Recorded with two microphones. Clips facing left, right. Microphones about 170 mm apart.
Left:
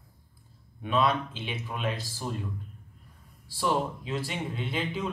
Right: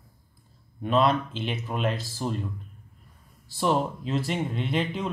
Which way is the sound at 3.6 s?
45° right (ahead or behind).